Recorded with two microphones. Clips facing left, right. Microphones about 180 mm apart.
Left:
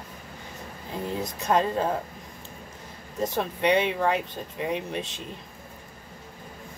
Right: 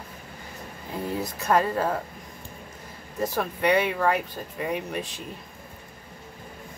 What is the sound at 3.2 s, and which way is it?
Speech, 25° left (ahead or behind).